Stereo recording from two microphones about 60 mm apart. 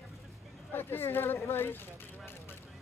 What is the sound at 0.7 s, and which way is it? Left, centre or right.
Speech, left.